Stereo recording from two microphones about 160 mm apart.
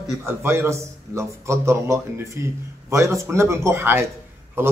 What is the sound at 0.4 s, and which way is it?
A man's voice, 15° right (ahead or behind).